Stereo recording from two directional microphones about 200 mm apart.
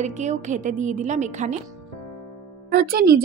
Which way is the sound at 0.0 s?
35° right (ahead or behind).